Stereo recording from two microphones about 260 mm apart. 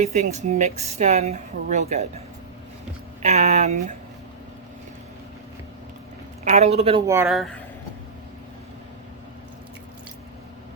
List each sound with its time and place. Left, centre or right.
0.0 s a woman's voice: right
3.2 s a woman's voice: right
6.4 s a woman's voice: right
7.1 s speech: centre